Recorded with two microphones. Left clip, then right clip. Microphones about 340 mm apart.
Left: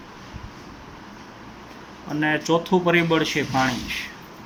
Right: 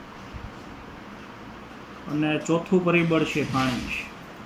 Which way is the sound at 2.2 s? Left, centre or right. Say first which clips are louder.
Left 4 dB; left.